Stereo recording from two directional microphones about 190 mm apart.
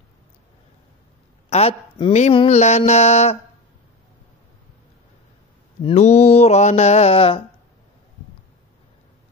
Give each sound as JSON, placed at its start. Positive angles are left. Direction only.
{"t": 1.5, "sound": "speech", "side_deg": 30}
{"t": 5.8, "sound": "speech", "side_deg": 30}